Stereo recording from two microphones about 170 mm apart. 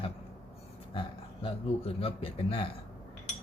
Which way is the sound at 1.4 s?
35° left (ahead or behind).